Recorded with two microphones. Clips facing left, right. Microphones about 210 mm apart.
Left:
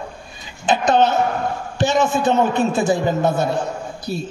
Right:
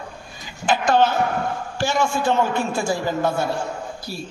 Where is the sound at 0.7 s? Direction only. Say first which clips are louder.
Left 2 dB; 20° left (ahead or behind).